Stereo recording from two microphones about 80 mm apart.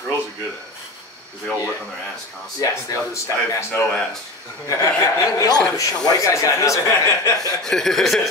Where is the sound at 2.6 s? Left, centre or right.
Left.